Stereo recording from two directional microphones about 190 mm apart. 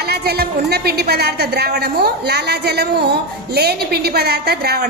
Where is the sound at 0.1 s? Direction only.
55° right (ahead or behind).